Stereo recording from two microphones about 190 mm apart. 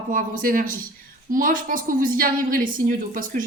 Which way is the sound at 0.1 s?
45° right (ahead or behind).